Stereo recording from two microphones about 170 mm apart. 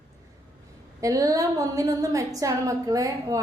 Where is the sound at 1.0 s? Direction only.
20° right (ahead or behind).